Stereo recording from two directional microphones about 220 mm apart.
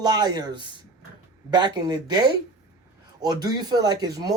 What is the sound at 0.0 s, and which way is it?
Speech, 20° right (ahead or behind).